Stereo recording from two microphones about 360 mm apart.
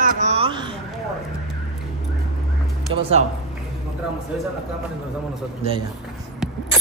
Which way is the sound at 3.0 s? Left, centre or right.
Centre.